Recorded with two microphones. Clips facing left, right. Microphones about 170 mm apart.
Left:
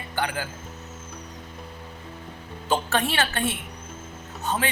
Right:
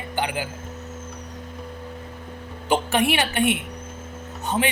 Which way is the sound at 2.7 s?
15° right (ahead or behind).